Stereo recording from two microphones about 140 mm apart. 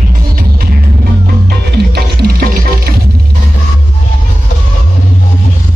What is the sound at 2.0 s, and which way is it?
Music, 90° right.